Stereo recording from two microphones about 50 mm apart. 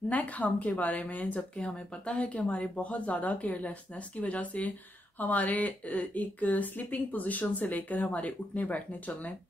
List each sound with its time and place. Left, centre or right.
0.1 s speech: left